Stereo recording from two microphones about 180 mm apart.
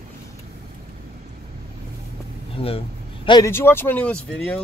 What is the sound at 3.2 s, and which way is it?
Speech, 20° left (ahead or behind).